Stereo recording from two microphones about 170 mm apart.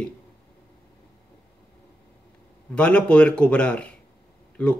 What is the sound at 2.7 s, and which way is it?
Speech, 5° left (ahead or behind).